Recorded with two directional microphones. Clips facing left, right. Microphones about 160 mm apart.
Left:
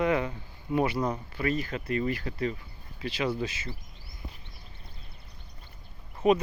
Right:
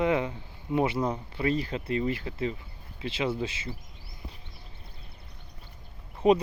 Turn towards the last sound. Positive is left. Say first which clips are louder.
# right 1 dB
turn(degrees=-30)  # may be behind; listen again after turning